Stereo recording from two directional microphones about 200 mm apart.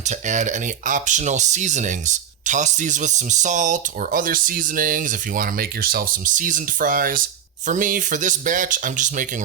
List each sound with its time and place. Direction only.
0.3 s speech: 35° right (ahead or behind)